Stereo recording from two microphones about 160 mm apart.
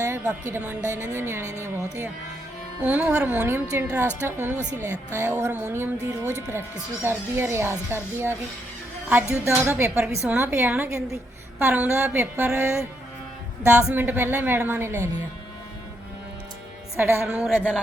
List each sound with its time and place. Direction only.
0.0 s speech: 15° right (ahead or behind)
2.8 s speech: 10° right (ahead or behind)
9.6 s speech: 15° right (ahead or behind)
17.0 s speech: 15° right (ahead or behind)